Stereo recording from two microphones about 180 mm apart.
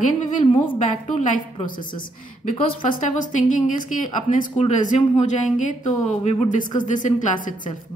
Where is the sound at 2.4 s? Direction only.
45° left (ahead or behind).